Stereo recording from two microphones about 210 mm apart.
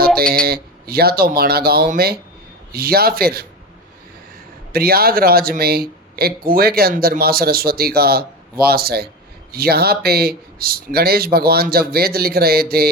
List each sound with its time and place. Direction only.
0.3 s speech: 45° right (ahead or behind)
4.7 s speech: 45° right (ahead or behind)